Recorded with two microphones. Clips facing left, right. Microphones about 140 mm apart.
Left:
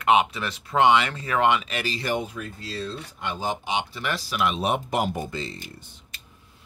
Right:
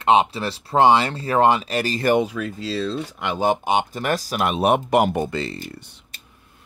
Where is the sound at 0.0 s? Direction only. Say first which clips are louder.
Right 3 dB; 30° right (ahead or behind); by 2.1 s 45° right (ahead or behind).